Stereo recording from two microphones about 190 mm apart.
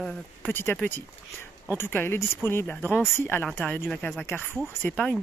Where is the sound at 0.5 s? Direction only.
10° left (ahead or behind).